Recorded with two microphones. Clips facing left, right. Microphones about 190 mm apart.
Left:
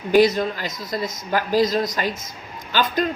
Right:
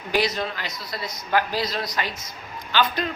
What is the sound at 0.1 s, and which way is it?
Speech, 50° left (ahead or behind).